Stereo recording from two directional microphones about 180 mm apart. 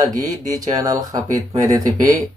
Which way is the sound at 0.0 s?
20° right (ahead or behind).